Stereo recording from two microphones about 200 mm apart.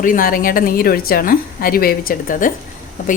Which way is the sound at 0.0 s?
45° left (ahead or behind).